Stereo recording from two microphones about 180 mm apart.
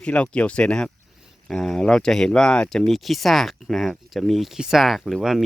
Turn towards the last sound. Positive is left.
turn(degrees=0)  # may be behind; listen again after turning